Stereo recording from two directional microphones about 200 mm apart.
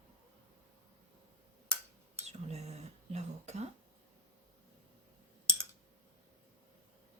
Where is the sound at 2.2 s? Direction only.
35° right (ahead or behind).